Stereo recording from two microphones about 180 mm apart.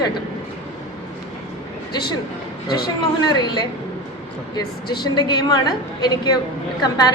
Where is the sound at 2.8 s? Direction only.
25° left (ahead or behind).